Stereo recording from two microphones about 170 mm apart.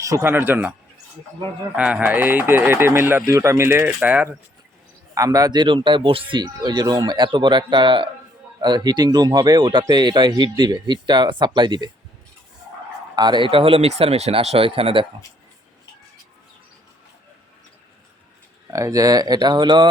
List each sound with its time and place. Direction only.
0.0 s speech: 15° right (ahead or behind)
1.7 s speech: 5° right (ahead or behind); by 11.9 s 25° right (ahead or behind)
13.1 s speech: 25° right (ahead or behind)
18.7 s speech: 20° right (ahead or behind)